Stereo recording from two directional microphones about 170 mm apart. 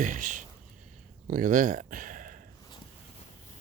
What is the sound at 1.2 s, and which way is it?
Speech, 50° right (ahead or behind).